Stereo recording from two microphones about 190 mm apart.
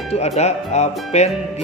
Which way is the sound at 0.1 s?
35° left (ahead or behind).